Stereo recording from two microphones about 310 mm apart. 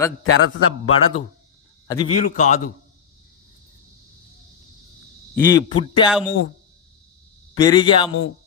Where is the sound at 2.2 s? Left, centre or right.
Left.